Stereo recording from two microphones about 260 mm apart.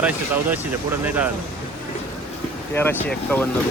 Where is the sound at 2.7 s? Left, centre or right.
Centre.